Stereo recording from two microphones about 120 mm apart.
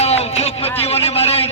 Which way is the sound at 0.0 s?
60° left (ahead or behind).